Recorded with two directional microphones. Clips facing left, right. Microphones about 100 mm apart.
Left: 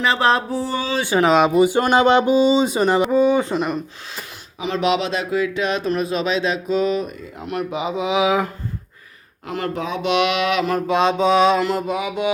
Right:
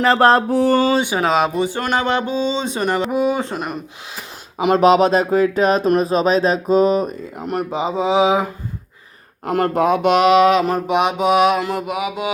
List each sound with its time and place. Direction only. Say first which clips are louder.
0.0 s mantra: right 5 dB; 45° right (ahead or behind)
0.5 s a sound: right 8 dB; 60° right (ahead or behind)
1.2 s speech: left 3 dB; centre (ahead or behind)
1.6 s speech: left 5 dB; 15° left (ahead or behind)
3.1 s mantra: left 3 dB; 10° right (ahead or behind)
4.5 s speech: right 7 dB; 50° right (ahead or behind); by 8.4 s 25° right (ahead or behind)
9.5 s speech: right 8 dB; 50° right (ahead or behind)
10.8 s mantra: even; 15° right (ahead or behind)